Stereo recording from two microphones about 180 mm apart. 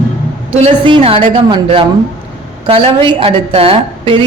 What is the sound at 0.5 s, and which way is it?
A man's voice, 35° right (ahead or behind).